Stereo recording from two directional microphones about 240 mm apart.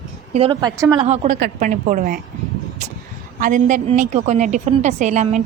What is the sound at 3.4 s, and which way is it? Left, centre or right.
A woman's voice, right.